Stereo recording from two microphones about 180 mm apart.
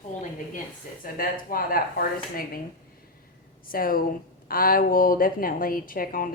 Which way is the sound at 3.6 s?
55° left (ahead or behind).